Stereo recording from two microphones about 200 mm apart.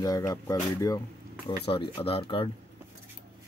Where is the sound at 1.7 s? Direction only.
25° left (ahead or behind).